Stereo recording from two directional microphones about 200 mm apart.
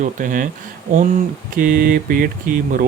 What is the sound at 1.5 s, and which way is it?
Speech, 45° right (ahead or behind).